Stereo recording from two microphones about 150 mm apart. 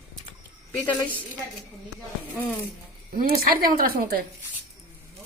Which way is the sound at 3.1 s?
75° right (ahead or behind).